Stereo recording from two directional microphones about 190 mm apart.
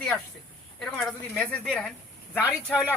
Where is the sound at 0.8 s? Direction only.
5° left (ahead or behind).